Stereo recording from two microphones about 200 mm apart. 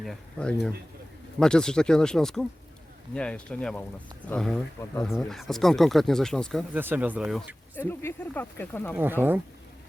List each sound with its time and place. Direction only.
0.0 s speech: 5° left (ahead or behind)
6.7 s speech: 10° right (ahead or behind)
7.8 s speech: 10° left (ahead or behind)
9.0 s speech: 10° right (ahead or behind)